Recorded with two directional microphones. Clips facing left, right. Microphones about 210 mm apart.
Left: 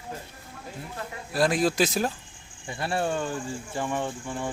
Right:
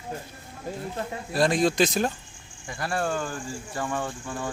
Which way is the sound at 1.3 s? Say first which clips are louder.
Right 1 dB; 5° left (ahead or behind).